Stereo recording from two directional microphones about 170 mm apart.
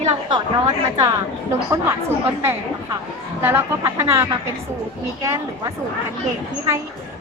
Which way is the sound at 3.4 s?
15° right (ahead or behind).